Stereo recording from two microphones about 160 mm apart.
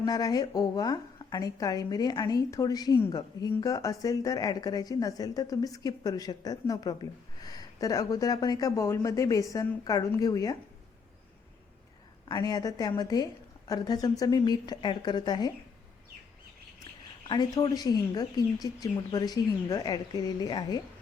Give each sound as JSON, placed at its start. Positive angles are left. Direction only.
{"t": 0.0, "sound": "a woman's voice", "side_deg": 25}
{"t": 12.3, "sound": "a woman's voice", "side_deg": 25}
{"t": 17.2, "sound": "a woman's voice", "side_deg": 25}